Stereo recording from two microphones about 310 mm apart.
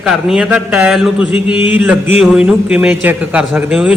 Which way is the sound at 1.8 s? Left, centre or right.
Centre.